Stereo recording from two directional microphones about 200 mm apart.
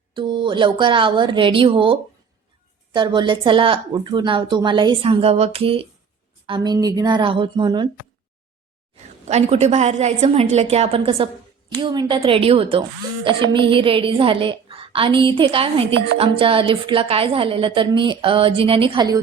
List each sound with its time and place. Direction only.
0.1 s a woman's voice: 25° right (ahead or behind)
9.2 s a woman's voice: 35° right (ahead or behind)